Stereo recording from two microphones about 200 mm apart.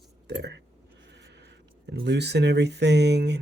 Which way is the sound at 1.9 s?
60° right (ahead or behind).